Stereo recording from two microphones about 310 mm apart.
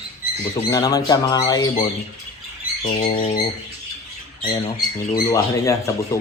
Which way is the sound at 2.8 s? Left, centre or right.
Centre.